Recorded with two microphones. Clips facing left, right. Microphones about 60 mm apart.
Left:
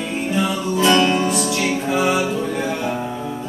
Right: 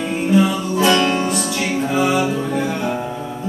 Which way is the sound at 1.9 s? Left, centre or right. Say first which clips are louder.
Right 1 dB; centre.